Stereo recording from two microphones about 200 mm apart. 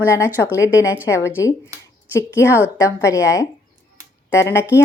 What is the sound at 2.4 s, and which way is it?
A woman's voice, 15° left (ahead or behind).